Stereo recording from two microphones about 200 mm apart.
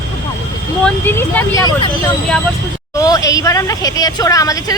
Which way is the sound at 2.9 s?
15° left (ahead or behind).